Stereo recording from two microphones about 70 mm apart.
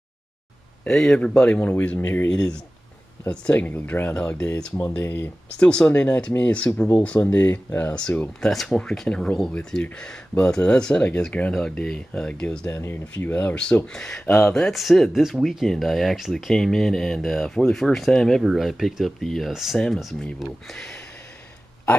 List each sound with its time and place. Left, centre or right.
0.8 s speech: centre
4.8 s speech: left
5.6 s speech: centre
8.4 s speech: centre
12.7 s speech: left
13.8 s speech: centre
18.4 s speech: centre